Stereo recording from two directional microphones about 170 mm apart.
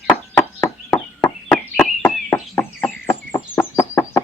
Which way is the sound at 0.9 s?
10° left (ahead or behind).